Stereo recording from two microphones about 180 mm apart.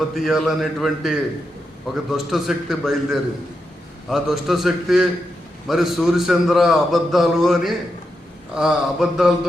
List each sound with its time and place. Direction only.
0.1 s a man's voice: centre (ahead or behind)